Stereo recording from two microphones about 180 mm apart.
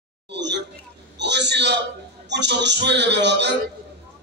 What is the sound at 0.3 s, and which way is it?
A man's voice, 75° right (ahead or behind).